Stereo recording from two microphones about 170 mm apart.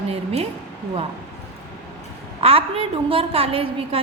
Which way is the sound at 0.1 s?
35° right (ahead or behind).